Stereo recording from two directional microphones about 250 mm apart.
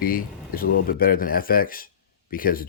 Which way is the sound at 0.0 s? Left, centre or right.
Left.